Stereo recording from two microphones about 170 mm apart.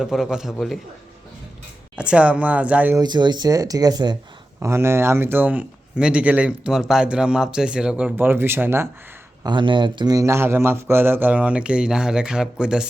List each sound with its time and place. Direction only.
0.0 s a man's voice: centre (ahead or behind)
2.0 s speech: 5° right (ahead or behind)
3.0 s speech: 25° right (ahead or behind)
9.4 s speech: 25° right (ahead or behind); by 12.9 s 5° right (ahead or behind)